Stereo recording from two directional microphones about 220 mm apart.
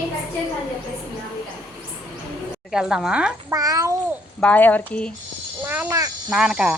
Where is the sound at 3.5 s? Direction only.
15° right (ahead or behind).